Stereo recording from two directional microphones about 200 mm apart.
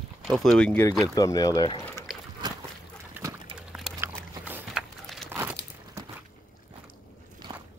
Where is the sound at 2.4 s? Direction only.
20° right (ahead or behind).